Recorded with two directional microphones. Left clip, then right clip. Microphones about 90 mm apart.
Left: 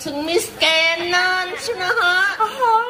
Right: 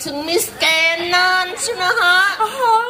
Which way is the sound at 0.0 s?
30° right (ahead or behind).